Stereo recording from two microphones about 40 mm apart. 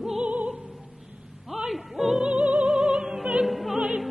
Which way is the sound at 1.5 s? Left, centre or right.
Centre.